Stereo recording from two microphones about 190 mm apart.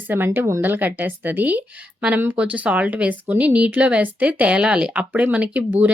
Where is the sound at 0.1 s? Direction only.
10° right (ahead or behind).